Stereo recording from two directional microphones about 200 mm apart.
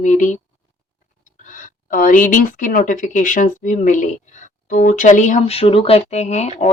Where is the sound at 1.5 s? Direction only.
40° left (ahead or behind).